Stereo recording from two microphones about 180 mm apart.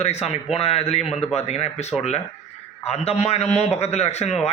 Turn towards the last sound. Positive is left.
turn(degrees=35)  # may be behind; listen again after turning